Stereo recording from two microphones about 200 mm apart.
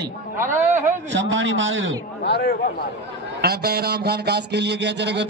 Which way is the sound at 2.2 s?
55° left (ahead or behind).